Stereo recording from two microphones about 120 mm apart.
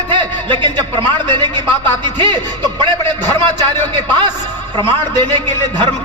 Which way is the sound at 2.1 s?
40° right (ahead or behind).